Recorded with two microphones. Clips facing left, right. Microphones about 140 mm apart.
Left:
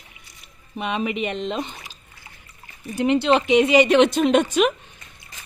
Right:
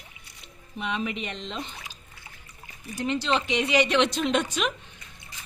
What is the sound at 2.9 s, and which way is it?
A woman's voice, 65° left (ahead or behind).